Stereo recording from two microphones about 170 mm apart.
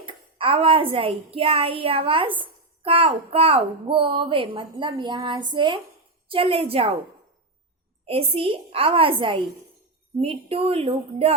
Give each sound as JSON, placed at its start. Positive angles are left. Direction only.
{"t": 0.0, "sound": "a child's voice", "side_deg": -30}
{"t": 8.0, "sound": "a child's voice", "side_deg": -35}